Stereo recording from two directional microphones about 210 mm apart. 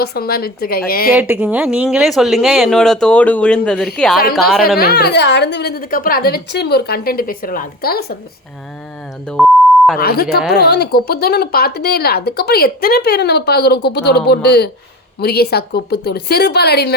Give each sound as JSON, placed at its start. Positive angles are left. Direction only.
{"t": 0.0, "sound": "speech", "side_deg": 50}
{"t": 1.1, "sound": "speech", "side_deg": -10}
{"t": 4.8, "sound": "speech", "side_deg": 50}
{"t": 9.2, "sound": "speech", "side_deg": 5}
{"t": 10.0, "sound": "speech", "side_deg": 50}